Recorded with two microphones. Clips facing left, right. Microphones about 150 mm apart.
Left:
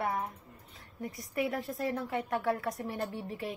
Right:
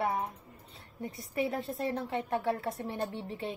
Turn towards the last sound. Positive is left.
turn(degrees=-25)  # may be behind; listen again after turning